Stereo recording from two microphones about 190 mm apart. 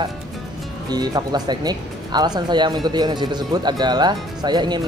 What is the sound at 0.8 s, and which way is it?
Speech, 20° right (ahead or behind).